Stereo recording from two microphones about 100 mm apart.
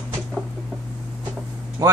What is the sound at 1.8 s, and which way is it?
Speech, 35° right (ahead or behind).